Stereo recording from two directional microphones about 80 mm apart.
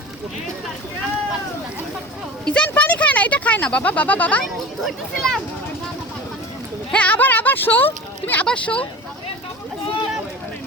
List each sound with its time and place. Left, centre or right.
2.4 s speech: centre
2.7 s a sound: centre
4.4 s speech: centre
6.9 s speech: centre